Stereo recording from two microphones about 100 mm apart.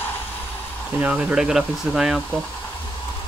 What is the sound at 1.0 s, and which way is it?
Speech, 10° right (ahead or behind).